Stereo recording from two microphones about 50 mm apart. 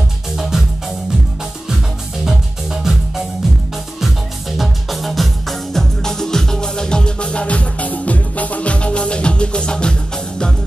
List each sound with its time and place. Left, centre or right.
0.4 s music: centre
2.2 s music: centre